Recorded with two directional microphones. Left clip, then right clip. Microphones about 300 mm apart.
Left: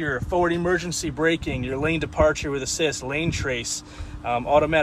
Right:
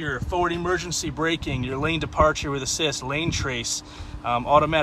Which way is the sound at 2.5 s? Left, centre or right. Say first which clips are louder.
Left 1 dB; right.